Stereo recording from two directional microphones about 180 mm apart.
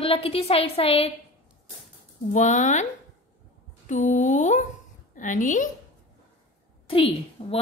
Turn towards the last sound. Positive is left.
turn(degrees=30)  # may be behind; listen again after turning